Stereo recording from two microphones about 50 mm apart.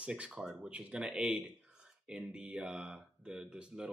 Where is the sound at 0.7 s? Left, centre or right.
Right.